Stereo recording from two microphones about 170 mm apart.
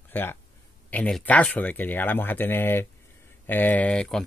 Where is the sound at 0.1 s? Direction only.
15° left (ahead or behind).